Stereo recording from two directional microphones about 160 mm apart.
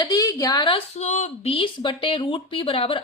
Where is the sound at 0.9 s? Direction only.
45° left (ahead or behind).